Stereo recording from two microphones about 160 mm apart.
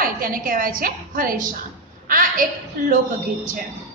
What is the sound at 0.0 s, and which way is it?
A woman's voice, 60° right (ahead or behind).